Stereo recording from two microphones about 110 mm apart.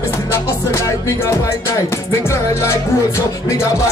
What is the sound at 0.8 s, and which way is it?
Speech, 30° left (ahead or behind).